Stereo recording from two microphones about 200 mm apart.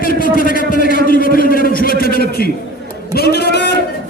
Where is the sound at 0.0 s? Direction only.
45° left (ahead or behind).